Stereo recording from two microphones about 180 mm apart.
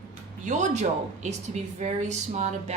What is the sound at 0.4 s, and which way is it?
Speech, 40° right (ahead or behind).